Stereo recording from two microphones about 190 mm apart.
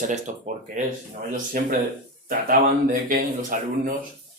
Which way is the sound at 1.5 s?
50° right (ahead or behind).